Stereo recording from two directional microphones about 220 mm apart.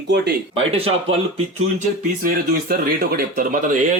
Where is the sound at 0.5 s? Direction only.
25° right (ahead or behind).